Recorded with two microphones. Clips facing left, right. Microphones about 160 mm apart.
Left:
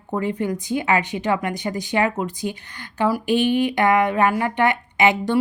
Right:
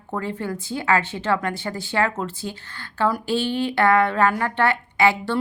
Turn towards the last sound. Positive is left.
turn(degrees=20)  # may be behind; listen again after turning